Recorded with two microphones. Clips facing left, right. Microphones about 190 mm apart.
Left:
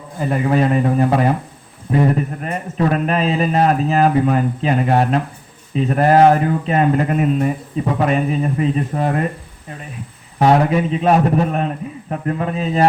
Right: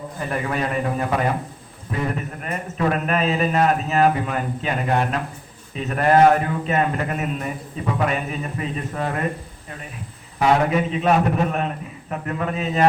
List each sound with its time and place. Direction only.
0.2 s a man's voice: 30° left (ahead or behind)
10.4 s a man's voice: 40° left (ahead or behind)